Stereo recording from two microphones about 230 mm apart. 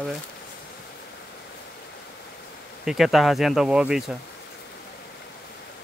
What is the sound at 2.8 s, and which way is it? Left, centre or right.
Speech, centre.